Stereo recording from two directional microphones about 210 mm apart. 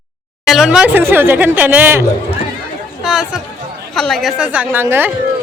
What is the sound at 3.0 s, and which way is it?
A woman's voice, centre (ahead or behind).